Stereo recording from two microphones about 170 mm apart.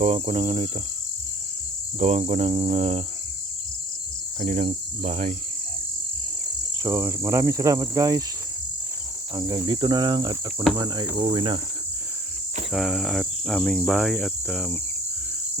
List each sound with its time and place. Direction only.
0.0 s cricket: 35° right (ahead or behind)
2.0 s cricket: 35° right (ahead or behind)
4.4 s cricket: 45° right (ahead or behind)
6.8 s cricket: 20° right (ahead or behind)
9.3 s cricket: 20° right (ahead or behind)
12.7 s cricket: centre (ahead or behind)